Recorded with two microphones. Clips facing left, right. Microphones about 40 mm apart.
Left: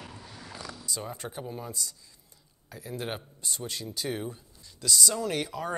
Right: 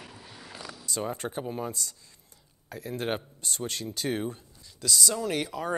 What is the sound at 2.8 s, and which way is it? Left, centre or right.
Speech, right.